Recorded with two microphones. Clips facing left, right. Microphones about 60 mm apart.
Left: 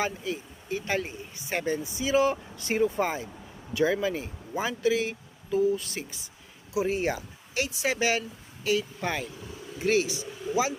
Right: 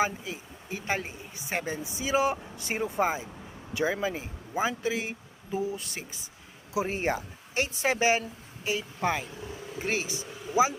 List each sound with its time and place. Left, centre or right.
0.0 s speech: centre
9.0 s speech: centre
9.8 s speech: right